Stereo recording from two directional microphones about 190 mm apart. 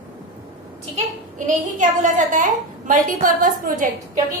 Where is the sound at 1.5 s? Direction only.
40° right (ahead or behind).